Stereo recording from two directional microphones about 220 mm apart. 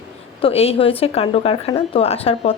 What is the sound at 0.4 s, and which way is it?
A woman's voice, 25° left (ahead or behind).